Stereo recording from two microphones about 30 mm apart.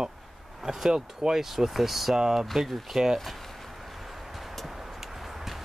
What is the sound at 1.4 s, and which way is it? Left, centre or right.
Speech, centre.